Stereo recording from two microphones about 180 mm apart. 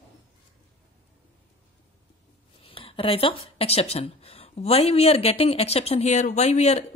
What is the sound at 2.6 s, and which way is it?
Speech, 30° left (ahead or behind).